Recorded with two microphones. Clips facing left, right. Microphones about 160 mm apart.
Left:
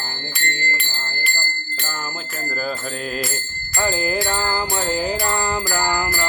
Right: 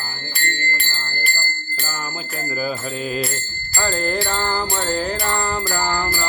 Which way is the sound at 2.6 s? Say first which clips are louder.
Right 2 dB; 5° right (ahead or behind).